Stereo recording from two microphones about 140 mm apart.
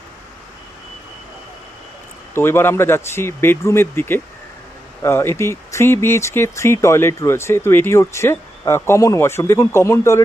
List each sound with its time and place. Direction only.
2.3 s speech: 15° left (ahead or behind)